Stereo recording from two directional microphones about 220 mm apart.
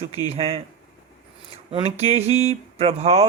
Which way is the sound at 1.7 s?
30° right (ahead or behind).